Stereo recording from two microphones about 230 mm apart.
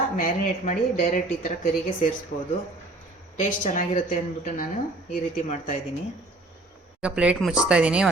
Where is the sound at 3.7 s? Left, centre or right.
Left.